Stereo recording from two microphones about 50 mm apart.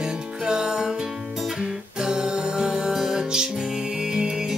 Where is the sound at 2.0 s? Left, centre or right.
Centre.